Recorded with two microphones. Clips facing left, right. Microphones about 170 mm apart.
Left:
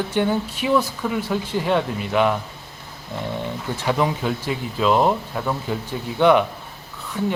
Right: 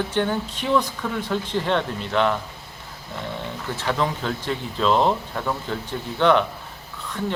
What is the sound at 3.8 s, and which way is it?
Speech, 15° left (ahead or behind).